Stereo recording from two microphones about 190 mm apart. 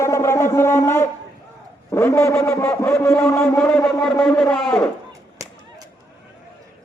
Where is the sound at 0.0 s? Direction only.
15° left (ahead or behind).